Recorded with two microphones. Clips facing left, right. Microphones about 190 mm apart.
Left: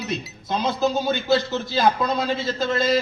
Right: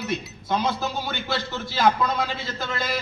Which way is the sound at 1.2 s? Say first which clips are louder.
Left 8 dB; 20° left (ahead or behind).